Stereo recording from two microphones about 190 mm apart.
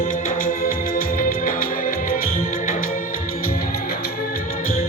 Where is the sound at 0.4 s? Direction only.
50° left (ahead or behind).